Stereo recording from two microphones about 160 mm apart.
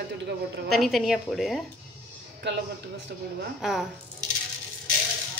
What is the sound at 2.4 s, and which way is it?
Speech, 90° right.